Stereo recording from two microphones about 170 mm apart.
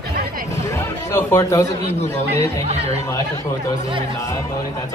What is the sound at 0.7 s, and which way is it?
Speech, 15° left (ahead or behind).